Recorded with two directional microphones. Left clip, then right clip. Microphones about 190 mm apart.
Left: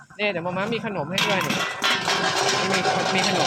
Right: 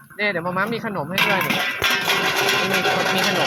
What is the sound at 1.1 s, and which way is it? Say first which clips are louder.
Speech: right 4 dB; 15° right (ahead or behind).